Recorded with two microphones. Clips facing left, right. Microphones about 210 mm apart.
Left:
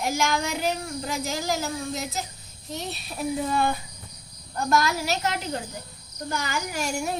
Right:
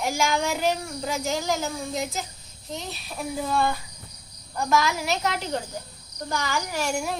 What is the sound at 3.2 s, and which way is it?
Speech, 5° left (ahead or behind).